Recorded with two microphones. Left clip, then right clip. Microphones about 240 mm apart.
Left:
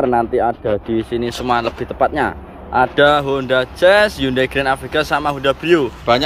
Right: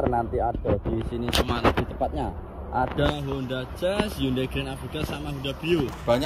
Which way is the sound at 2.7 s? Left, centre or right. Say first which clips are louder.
Left 13 dB; left.